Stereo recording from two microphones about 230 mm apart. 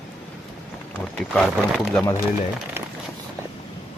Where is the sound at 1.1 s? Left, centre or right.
Centre.